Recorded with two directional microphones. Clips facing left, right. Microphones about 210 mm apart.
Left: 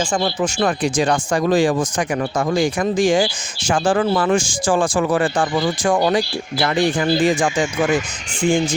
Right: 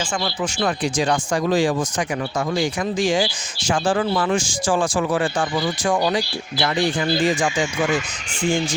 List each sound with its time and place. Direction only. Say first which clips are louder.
0.4 s speech: left 3 dB; 50° left (ahead or behind)